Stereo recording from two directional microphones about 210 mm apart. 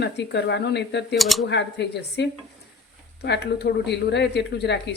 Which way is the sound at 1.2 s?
Centre (ahead or behind).